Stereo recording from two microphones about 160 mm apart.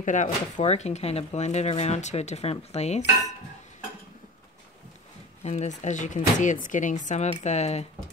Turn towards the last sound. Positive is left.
turn(degrees=45)  # may be behind; listen again after turning